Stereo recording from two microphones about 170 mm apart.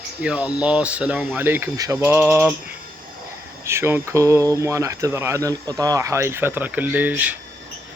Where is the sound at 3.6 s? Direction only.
15° right (ahead or behind).